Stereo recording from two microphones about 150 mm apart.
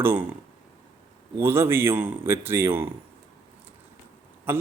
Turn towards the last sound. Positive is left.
turn(degrees=-15)  # may be behind; listen again after turning